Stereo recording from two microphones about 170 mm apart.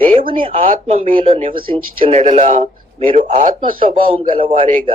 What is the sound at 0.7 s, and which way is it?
A man's voice, 45° right (ahead or behind).